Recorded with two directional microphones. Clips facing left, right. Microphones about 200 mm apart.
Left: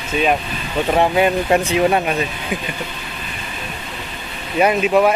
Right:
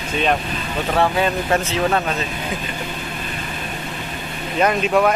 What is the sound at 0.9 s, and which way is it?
Speech, 15° left (ahead or behind).